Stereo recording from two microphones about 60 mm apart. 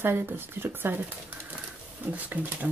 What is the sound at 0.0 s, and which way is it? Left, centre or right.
Speech, right.